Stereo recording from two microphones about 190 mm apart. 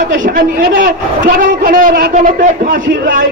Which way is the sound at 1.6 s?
50° right (ahead or behind).